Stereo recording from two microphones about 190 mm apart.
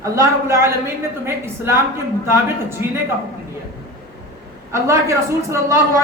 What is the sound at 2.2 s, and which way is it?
Speech, 15° right (ahead or behind).